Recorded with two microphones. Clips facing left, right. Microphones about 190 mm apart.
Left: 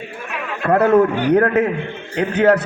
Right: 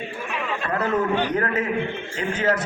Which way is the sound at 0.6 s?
60° left (ahead or behind).